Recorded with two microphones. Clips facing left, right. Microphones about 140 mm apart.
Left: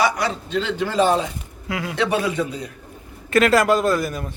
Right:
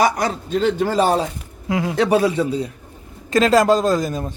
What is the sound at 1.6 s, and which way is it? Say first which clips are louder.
Speech: right 6 dB; 25° right (ahead or behind).